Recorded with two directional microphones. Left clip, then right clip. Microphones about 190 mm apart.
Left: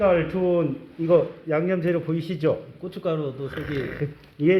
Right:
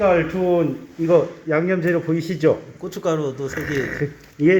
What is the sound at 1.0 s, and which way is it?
Speech, 20° right (ahead or behind).